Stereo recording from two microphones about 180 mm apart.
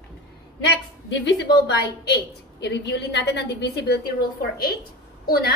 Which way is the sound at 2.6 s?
70° left (ahead or behind).